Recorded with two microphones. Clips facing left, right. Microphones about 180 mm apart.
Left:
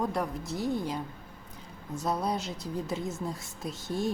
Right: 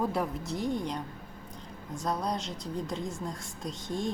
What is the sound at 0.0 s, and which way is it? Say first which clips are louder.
A woman's voice: right 1 dB; centre (ahead or behind).